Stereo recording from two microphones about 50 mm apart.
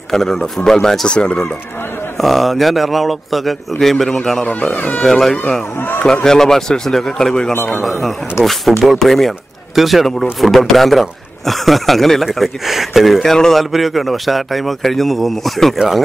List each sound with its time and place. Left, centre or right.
0.1 s a man's voice: centre
2.1 s a man's voice: centre
4.7 s speech: left
5.0 s a man's voice: centre
5.8 s a man's voice: left
6.2 s a man's voice: centre
8.4 s speech: left
8.8 s a man's voice: centre